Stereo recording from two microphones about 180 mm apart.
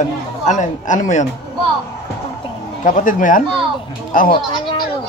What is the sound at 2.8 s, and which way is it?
Speech, 45° left (ahead or behind).